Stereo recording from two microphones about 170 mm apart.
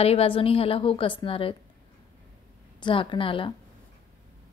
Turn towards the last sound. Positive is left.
turn(degrees=30)  # may be behind; listen again after turning